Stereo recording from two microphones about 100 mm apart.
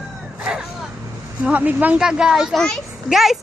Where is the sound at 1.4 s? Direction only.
15° right (ahead or behind).